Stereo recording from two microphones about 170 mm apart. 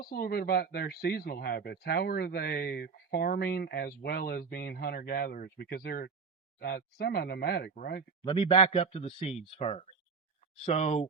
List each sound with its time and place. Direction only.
0.0 s speech: 60° left (ahead or behind)
8.2 s speech: 30° left (ahead or behind)